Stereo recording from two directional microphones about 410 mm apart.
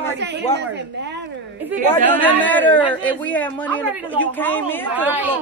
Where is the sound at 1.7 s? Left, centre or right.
Centre.